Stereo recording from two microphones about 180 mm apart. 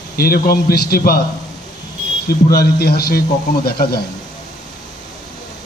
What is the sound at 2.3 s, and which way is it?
A man's voice, 60° left (ahead or behind).